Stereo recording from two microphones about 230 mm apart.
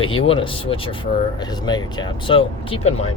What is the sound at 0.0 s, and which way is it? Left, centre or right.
Speech, left.